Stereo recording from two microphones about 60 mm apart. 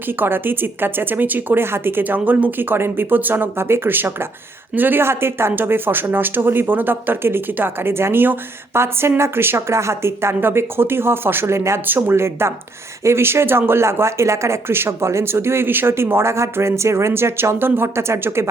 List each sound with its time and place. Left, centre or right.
0.2 s speech: right
11.9 s speech: right